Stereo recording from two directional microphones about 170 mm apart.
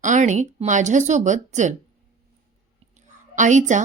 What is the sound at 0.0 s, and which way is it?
A woman's voice, 45° right (ahead or behind).